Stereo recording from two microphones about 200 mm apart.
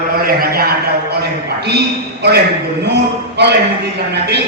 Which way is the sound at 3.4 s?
60° right (ahead or behind).